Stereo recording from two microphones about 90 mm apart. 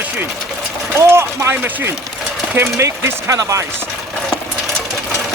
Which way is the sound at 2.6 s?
30° right (ahead or behind).